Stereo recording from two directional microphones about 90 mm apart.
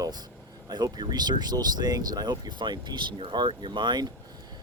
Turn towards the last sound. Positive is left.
turn(degrees=-55)  # may be behind; listen again after turning